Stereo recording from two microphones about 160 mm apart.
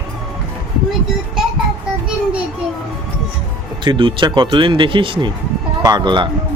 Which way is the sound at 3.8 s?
30° right (ahead or behind).